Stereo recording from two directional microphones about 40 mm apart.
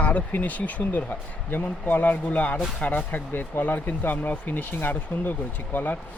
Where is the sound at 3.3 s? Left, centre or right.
Left.